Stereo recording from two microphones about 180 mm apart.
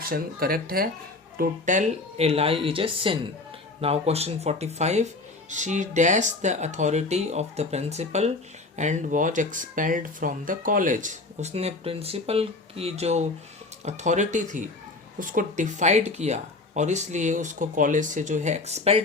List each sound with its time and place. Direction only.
0.0 s speech: 55° right (ahead or behind)
1.4 s speech: 45° right (ahead or behind)